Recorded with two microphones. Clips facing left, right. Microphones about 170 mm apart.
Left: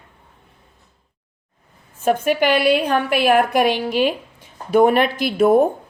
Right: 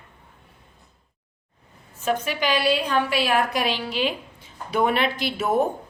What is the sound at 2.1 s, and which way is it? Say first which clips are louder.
A woman's voice: left 7 dB; 55° left (ahead or behind).